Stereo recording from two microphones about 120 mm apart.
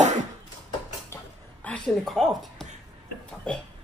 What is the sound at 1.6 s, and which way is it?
A woman's voice, 5° left (ahead or behind).